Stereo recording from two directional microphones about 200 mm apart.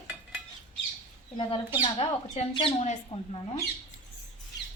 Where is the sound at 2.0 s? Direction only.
25° left (ahead or behind).